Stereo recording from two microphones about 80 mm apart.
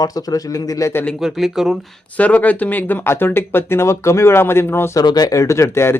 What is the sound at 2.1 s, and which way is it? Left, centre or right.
Speech, centre.